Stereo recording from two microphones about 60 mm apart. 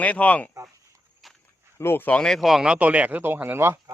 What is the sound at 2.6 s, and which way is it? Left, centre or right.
Speech, right.